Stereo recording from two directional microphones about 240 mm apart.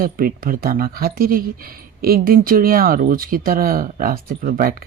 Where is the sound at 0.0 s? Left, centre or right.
Right.